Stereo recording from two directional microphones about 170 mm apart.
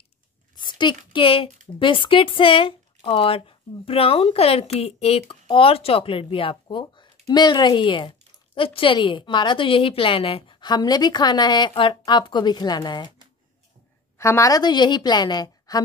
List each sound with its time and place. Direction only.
0.6 s a woman's voice: 25° left (ahead or behind)
14.1 s a woman's voice: 15° left (ahead or behind)